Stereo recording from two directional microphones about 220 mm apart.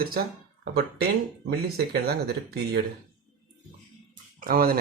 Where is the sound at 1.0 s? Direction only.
45° right (ahead or behind).